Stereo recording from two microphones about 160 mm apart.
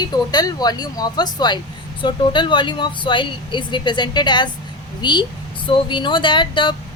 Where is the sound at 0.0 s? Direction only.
25° left (ahead or behind).